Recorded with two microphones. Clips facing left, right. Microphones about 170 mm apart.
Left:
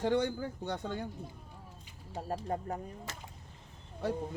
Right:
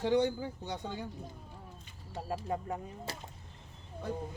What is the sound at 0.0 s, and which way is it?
Speech, 55° left (ahead or behind).